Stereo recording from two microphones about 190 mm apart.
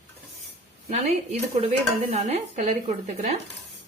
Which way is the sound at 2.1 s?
35° right (ahead or behind).